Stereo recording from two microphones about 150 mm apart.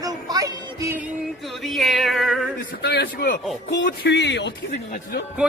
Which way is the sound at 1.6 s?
Centre (ahead or behind).